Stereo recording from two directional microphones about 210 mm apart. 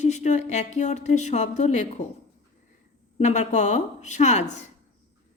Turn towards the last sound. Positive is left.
turn(degrees=35)  # may be behind; listen again after turning